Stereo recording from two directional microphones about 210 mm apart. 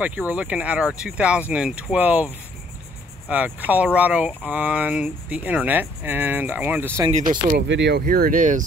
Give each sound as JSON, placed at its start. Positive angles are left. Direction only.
{"t": 0.0, "sound": "speech", "side_deg": -5}
{"t": 7.5, "sound": "speech", "side_deg": -55}